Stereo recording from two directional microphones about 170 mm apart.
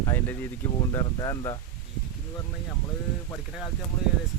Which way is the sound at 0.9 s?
20° left (ahead or behind).